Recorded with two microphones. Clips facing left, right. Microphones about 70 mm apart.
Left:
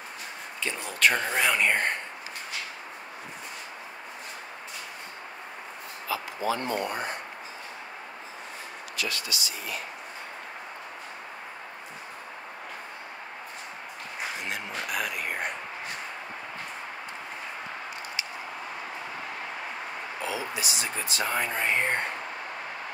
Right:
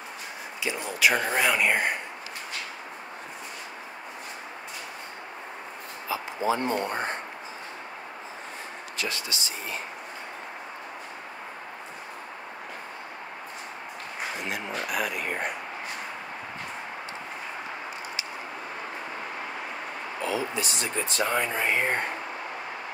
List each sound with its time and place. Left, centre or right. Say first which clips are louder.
0.7 s speech: right 1 dB; centre
6.0 s a sound: right 2 dB; right
6.7 s speech: right 2 dB; right
8.9 s speech: even; right
14.8 s speech: right 2 dB; centre
20.5 s speech: right 2 dB; centre